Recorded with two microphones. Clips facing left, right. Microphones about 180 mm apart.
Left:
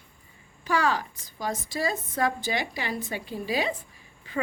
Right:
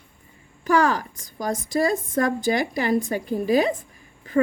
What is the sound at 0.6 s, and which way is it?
A woman's voice, 45° right (ahead or behind).